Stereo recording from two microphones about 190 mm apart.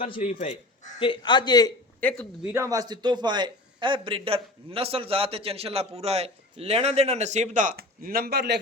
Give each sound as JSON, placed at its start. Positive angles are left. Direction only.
{"t": 0.0, "sound": "a man's voice", "side_deg": 30}
{"t": 2.0, "sound": "speech", "side_deg": 5}
{"t": 2.4, "sound": "speech", "side_deg": -10}
{"t": 2.6, "sound": "a man's voice", "side_deg": -20}